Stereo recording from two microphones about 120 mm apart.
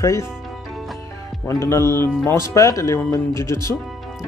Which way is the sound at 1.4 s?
25° left (ahead or behind).